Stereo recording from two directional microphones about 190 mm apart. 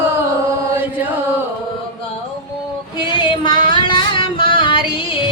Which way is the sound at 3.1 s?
25° left (ahead or behind).